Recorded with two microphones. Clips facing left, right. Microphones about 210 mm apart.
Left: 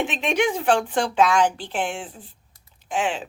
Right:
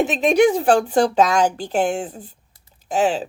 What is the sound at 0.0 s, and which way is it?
Speech, 40° right (ahead or behind).